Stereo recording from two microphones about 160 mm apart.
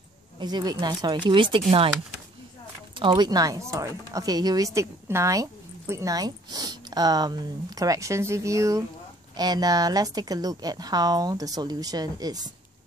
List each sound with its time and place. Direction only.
0.4 s speech: 25° right (ahead or behind)
3.0 s speech: 30° right (ahead or behind)